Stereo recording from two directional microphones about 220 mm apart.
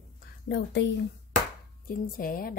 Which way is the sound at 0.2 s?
50° left (ahead or behind).